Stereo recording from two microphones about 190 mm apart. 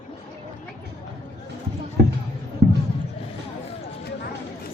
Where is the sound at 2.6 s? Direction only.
65° right (ahead or behind).